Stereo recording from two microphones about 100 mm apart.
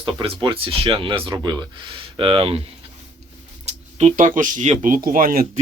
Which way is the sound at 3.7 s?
90° right.